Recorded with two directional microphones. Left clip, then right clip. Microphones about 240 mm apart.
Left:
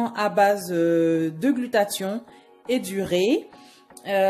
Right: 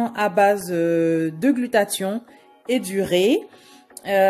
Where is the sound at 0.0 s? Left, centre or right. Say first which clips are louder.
Right 2 dB; centre.